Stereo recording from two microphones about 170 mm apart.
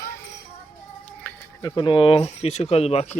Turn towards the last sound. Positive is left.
turn(degrees=40)  # may be behind; listen again after turning